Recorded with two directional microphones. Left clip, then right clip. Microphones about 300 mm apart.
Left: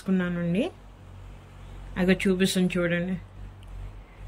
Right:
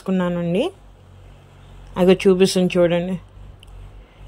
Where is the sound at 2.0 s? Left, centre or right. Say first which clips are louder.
Right 10 dB; centre.